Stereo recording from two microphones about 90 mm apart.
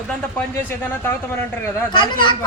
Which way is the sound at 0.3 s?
25° left (ahead or behind).